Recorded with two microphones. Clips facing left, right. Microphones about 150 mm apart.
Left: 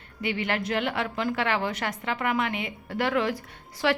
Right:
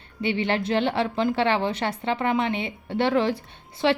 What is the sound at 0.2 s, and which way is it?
A woman's voice, 30° right (ahead or behind).